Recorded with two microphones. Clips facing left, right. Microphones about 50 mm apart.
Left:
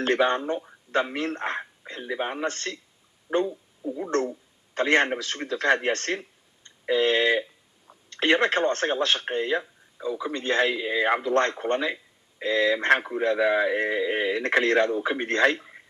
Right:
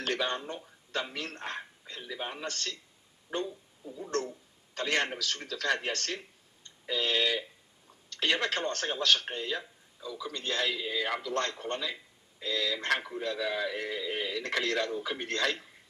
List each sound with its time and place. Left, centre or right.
0.0 s a man's voice: left